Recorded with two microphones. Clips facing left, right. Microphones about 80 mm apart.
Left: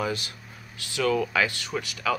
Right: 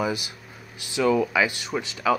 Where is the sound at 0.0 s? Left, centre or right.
Centre.